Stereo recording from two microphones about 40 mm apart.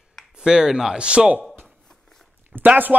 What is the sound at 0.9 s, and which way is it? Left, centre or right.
Speech, right.